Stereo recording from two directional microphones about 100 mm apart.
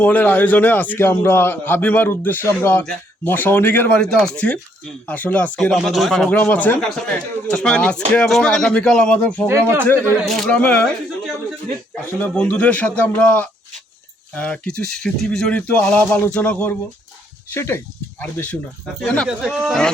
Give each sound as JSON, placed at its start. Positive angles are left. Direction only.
{"t": 0.0, "sound": "a man's voice", "side_deg": 15}
{"t": 4.0, "sound": "speech", "side_deg": 5}
{"t": 5.7, "sound": "speech", "side_deg": 0}
{"t": 6.2, "sound": "speech", "side_deg": 20}
{"t": 9.5, "sound": "speech", "side_deg": -25}
{"t": 10.2, "sound": "speech", "side_deg": 5}
{"t": 12.2, "sound": "a man's voice", "side_deg": 10}
{"t": 19.3, "sound": "speech", "side_deg": -10}